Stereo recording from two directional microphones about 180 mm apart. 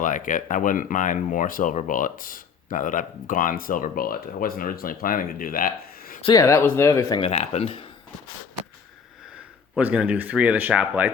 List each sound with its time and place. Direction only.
0.0 s speech: 45° left (ahead or behind)
6.2 s speech: 20° left (ahead or behind)
7.2 s speech: 35° left (ahead or behind)
9.7 s speech: 5° right (ahead or behind)